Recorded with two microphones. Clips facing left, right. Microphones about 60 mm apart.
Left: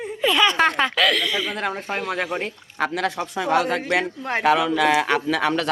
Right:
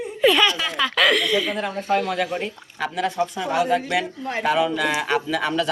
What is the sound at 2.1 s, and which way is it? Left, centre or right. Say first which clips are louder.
Speech: right 1 dB; left.